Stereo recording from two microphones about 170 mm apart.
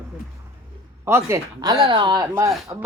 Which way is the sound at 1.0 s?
15° right (ahead or behind).